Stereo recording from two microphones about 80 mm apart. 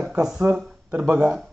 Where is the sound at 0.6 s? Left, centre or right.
Centre.